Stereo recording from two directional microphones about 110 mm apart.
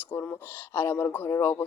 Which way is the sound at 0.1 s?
20° left (ahead or behind).